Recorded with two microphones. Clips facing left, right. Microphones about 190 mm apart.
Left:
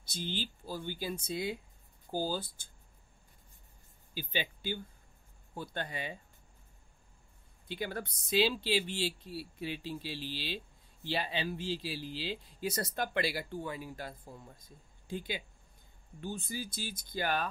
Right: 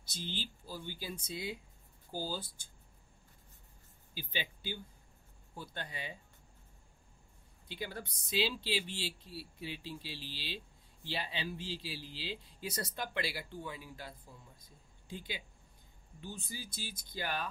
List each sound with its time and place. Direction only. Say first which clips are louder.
0.0 s speech: left 4 dB; 55° left (ahead or behind)
4.1 s speech: left 4 dB; 55° left (ahead or behind)
7.6 s speech: left 5 dB; 55° left (ahead or behind)